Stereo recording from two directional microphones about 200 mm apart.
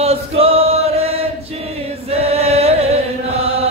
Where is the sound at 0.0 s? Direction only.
30° right (ahead or behind).